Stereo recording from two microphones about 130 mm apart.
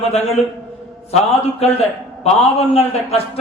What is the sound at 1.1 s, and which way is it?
A man's voice, 50° left (ahead or behind).